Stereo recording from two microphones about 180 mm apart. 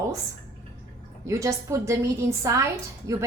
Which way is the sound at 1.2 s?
15° right (ahead or behind).